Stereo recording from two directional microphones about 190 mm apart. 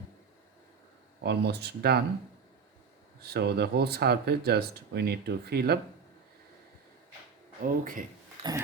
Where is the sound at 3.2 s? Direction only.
60° right (ahead or behind).